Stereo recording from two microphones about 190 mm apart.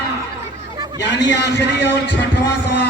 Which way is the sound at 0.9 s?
65° left (ahead or behind).